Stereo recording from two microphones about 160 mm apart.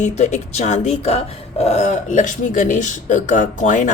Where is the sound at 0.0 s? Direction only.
45° left (ahead or behind).